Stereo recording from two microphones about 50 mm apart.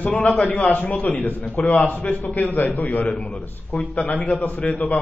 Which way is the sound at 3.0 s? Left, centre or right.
Left.